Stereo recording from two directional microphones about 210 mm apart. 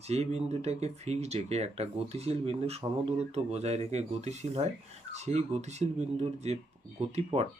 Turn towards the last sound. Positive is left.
turn(degrees=-30)  # may be behind; listen again after turning